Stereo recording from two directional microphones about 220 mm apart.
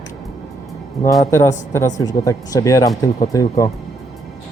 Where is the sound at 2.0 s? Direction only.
15° left (ahead or behind).